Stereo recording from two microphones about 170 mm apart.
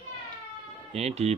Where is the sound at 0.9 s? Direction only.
40° right (ahead or behind).